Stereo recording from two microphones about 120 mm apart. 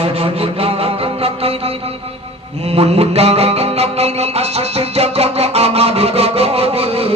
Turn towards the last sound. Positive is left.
turn(degrees=-55)  # may be behind; listen again after turning